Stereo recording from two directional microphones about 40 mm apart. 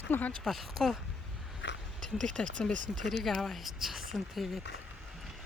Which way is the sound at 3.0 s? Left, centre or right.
Centre.